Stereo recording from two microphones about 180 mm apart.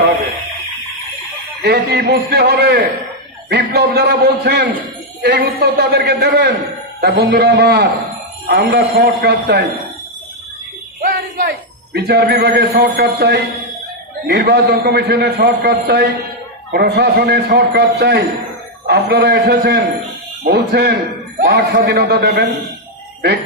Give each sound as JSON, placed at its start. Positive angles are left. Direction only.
{"t": 1.6, "sound": "a man's voice", "side_deg": -60}
{"t": 11.0, "sound": "a sound", "side_deg": -55}
{"t": 11.9, "sound": "a man's voice", "side_deg": -65}